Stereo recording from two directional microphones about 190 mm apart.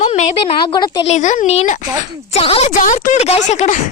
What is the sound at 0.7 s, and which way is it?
Speech, 25° left (ahead or behind).